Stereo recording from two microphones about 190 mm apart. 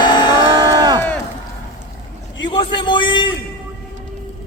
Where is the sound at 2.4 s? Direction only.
25° left (ahead or behind).